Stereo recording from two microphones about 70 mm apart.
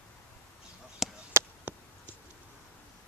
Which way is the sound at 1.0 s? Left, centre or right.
Centre.